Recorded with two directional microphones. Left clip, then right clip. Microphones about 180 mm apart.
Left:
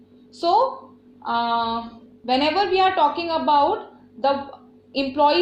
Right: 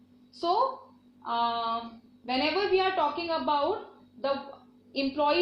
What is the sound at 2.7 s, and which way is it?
Speech, 45° left (ahead or behind).